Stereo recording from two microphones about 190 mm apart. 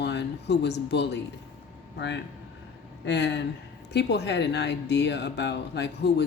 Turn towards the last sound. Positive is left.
turn(degrees=65)  # may be behind; listen again after turning